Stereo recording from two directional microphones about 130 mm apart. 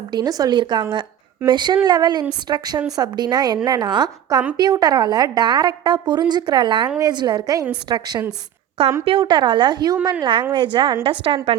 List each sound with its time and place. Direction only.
0.1 s a woman's voice: 30° right (ahead or behind)